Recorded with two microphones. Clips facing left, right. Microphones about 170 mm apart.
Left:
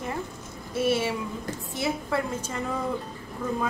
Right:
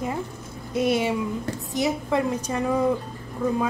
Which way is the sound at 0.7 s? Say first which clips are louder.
Right 3 dB; 15° right (ahead or behind).